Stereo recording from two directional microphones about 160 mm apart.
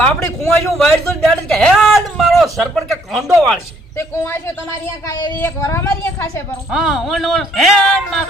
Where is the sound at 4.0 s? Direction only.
15° left (ahead or behind).